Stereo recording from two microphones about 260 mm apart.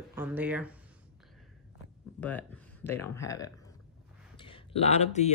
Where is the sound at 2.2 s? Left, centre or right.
Centre.